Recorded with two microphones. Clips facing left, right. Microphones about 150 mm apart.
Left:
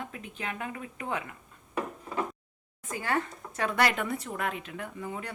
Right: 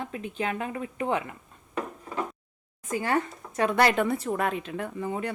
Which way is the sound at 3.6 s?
30° right (ahead or behind).